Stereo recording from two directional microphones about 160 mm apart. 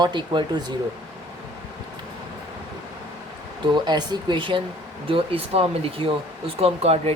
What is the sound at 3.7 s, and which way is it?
Speech, 25° right (ahead or behind).